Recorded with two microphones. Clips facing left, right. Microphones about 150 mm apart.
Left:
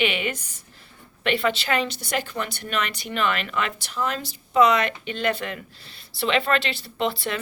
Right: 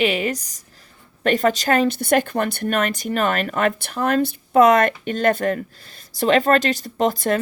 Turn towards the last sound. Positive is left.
turn(degrees=-45)  # may be behind; listen again after turning